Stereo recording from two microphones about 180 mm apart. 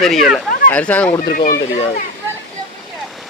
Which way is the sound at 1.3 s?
50° left (ahead or behind).